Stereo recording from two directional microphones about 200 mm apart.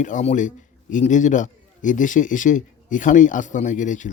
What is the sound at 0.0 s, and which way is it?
A man's voice, 35° left (ahead or behind).